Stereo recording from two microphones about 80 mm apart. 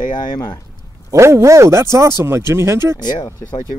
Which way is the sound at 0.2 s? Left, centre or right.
Left.